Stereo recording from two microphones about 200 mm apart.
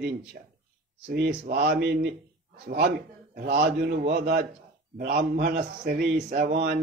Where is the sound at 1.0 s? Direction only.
50° right (ahead or behind).